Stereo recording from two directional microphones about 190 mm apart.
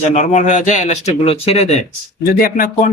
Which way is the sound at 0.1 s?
40° left (ahead or behind).